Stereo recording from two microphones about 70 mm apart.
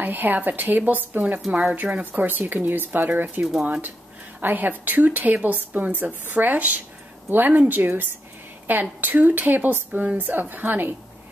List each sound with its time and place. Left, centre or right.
0.0 s a woman's voice: right